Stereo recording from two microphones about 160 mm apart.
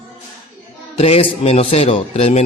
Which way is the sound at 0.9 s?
40° left (ahead or behind).